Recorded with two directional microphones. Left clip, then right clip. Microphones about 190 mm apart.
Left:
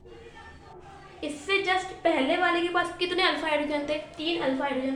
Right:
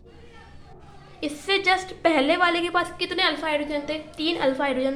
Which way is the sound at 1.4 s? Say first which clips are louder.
Right 4 dB; 30° right (ahead or behind).